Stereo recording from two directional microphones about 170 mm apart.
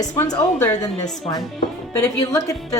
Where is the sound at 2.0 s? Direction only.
20° left (ahead or behind).